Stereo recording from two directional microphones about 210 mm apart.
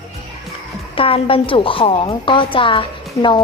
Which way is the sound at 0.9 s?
25° left (ahead or behind).